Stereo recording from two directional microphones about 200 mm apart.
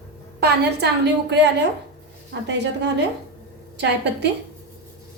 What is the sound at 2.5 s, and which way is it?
A woman's voice, 60° right (ahead or behind).